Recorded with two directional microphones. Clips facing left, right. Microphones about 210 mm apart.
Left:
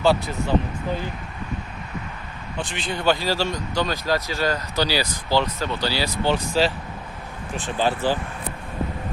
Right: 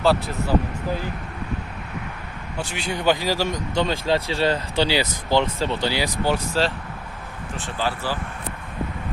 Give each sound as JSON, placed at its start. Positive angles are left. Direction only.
{"t": 0.0, "sound": "speech", "side_deg": 0}
{"t": 2.6, "sound": "speech", "side_deg": -10}
{"t": 7.5, "sound": "speech", "side_deg": 15}